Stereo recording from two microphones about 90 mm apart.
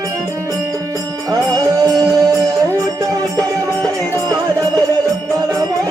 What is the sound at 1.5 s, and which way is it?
Music, 45° right (ahead or behind).